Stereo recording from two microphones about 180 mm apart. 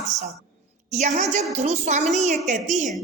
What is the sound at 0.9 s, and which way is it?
A woman's voice, 40° right (ahead or behind).